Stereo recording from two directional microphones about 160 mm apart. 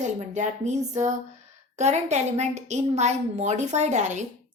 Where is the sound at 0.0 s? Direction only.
45° right (ahead or behind).